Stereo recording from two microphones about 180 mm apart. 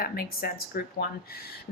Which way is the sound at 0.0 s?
55° left (ahead or behind).